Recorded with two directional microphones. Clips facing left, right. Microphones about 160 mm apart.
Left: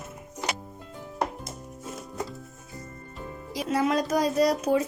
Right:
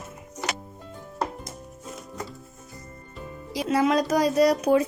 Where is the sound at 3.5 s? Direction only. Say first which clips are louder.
Right 3 dB; 90° right.